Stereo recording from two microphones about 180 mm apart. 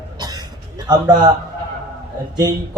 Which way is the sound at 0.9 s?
25° right (ahead or behind).